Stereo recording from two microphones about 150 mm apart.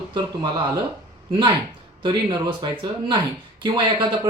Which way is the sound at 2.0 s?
30° right (ahead or behind).